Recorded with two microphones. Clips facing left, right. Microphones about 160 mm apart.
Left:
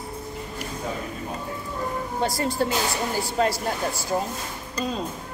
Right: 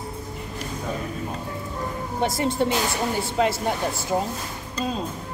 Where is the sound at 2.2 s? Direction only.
25° right (ahead or behind).